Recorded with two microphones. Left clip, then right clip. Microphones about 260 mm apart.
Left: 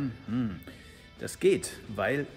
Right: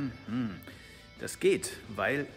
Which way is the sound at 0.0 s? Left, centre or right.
Centre.